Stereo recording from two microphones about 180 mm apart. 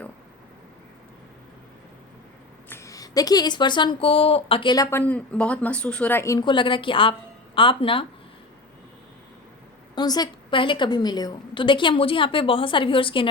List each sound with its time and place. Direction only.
2.6 s speech: 15° left (ahead or behind)
9.9 s speech: 25° left (ahead or behind)